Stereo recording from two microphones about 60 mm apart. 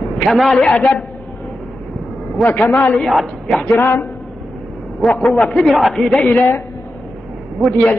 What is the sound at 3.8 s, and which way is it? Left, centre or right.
Speech, left.